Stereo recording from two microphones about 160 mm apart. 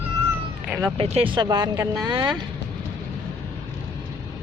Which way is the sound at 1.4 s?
25° right (ahead or behind).